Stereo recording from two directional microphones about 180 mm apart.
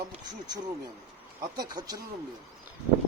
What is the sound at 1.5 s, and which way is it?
Speech, 20° right (ahead or behind).